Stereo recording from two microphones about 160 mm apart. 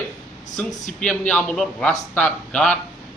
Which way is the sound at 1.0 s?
5° left (ahead or behind).